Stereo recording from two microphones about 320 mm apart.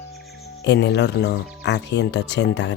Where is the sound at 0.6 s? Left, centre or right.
Left.